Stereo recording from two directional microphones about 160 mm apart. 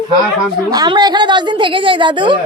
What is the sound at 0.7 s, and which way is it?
A woman's voice, 25° right (ahead or behind).